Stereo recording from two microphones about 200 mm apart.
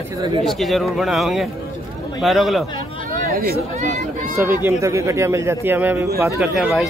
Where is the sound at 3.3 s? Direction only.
45° right (ahead or behind).